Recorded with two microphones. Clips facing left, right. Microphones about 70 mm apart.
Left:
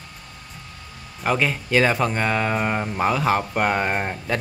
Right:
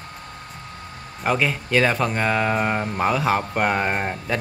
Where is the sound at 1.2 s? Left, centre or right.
Centre.